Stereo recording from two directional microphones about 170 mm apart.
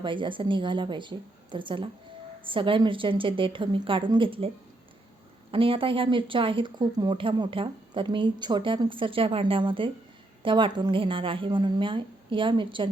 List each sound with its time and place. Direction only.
0.0 s speech: 30° right (ahead or behind)